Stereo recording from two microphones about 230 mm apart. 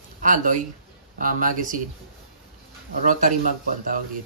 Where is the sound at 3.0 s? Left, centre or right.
Right.